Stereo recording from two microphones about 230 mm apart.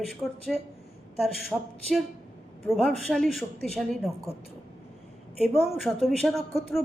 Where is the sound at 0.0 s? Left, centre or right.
Centre.